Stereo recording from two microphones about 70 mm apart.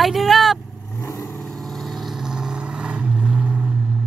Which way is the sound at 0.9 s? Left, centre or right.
Left.